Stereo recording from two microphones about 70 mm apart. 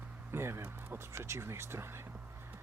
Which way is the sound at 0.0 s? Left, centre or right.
Right.